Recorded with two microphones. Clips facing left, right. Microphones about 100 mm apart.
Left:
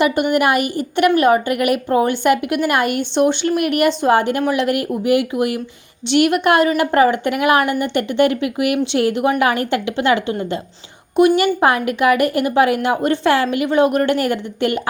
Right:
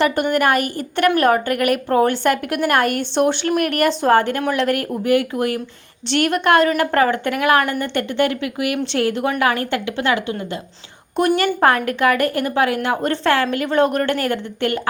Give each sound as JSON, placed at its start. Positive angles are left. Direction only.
{"t": 0.0, "sound": "a woman's voice", "side_deg": 10}
{"t": 11.3, "sound": "a woman's voice", "side_deg": 10}